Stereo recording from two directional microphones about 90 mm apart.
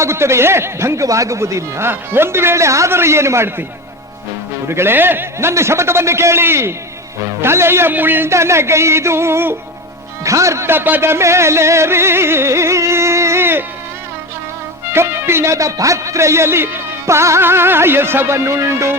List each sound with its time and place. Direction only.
0.0 s speech: 30° right (ahead or behind)
4.7 s speech: 25° right (ahead or behind)
10.2 s music: 35° right (ahead or behind)
14.8 s speech: 25° right (ahead or behind)